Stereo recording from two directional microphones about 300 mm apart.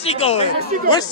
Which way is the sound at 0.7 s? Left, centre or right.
Right.